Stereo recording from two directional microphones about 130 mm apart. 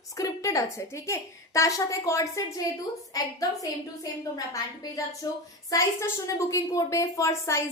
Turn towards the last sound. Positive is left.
turn(degrees=20)  # may be behind; listen again after turning